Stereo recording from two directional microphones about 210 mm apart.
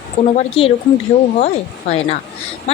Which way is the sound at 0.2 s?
30° left (ahead or behind).